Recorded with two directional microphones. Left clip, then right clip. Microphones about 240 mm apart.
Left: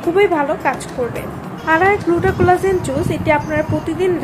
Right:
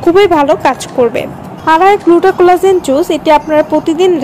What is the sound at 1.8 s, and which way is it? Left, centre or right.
A woman's voice, right.